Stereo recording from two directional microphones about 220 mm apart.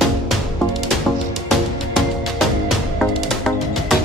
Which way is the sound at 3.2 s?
Centre (ahead or behind).